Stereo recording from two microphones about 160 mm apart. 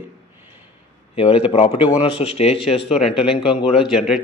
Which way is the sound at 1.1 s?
35° left (ahead or behind).